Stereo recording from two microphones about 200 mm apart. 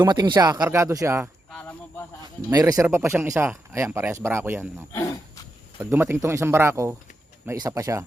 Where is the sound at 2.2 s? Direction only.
20° right (ahead or behind).